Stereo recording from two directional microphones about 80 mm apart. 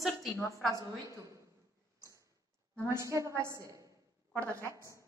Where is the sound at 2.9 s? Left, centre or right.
Right.